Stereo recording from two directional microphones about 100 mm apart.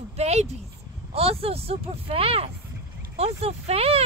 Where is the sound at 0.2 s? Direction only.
90° right.